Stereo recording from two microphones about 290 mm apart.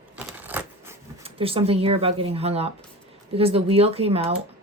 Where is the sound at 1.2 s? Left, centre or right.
Centre.